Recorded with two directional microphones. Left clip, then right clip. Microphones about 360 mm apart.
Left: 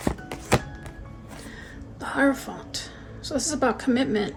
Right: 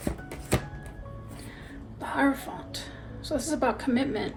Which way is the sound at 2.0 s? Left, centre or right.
Left.